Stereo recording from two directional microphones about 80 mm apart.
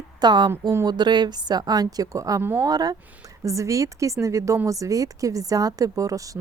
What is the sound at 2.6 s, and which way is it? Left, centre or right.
Speech, right.